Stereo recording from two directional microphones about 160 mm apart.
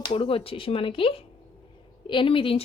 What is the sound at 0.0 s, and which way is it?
Speech, 30° left (ahead or behind).